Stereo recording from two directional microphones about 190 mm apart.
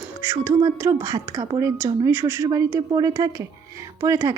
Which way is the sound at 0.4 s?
15° right (ahead or behind).